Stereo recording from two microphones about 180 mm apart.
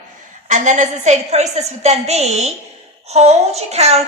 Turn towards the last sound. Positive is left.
turn(degrees=-35)  # may be behind; listen again after turning